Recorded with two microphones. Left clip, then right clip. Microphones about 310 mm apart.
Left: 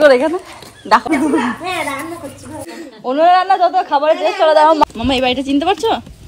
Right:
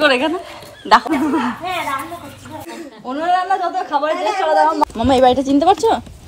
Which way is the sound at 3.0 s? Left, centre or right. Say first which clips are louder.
Left 6 dB; left.